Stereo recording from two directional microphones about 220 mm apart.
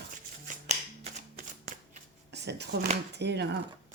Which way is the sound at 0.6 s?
30° right (ahead or behind).